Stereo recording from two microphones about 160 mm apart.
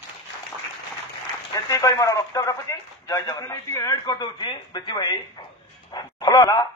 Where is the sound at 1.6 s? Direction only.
20° left (ahead or behind).